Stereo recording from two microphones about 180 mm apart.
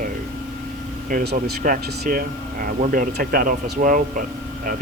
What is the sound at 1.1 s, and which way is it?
Speech, 50° right (ahead or behind).